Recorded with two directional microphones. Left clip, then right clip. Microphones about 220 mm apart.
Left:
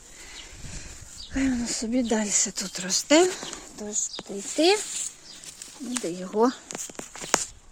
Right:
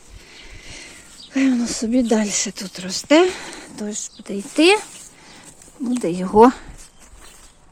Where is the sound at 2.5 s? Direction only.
Centre (ahead or behind).